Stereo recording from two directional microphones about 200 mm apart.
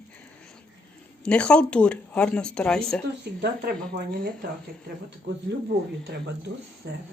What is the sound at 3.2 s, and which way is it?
Speech, 55° right (ahead or behind).